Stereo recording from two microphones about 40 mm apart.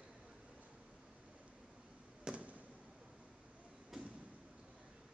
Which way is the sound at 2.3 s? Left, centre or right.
Centre.